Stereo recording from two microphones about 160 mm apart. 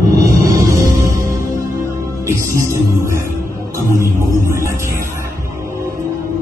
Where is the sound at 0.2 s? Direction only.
20° right (ahead or behind).